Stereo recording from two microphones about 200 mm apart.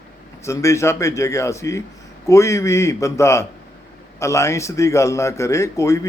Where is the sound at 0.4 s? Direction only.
15° left (ahead or behind).